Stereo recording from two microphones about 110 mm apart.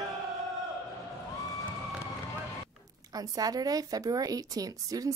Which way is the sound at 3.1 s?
35° right (ahead or behind).